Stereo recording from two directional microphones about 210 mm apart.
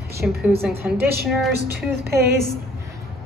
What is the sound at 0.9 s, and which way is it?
Speech, 50° right (ahead or behind).